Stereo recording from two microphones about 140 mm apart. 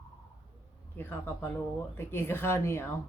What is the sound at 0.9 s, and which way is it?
A woman's voice, 15° left (ahead or behind).